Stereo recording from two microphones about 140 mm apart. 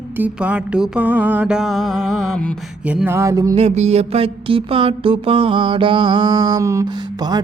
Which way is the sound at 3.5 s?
50° right (ahead or behind).